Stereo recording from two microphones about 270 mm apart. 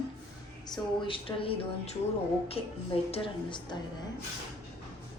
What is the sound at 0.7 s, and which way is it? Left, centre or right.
Speech, centre.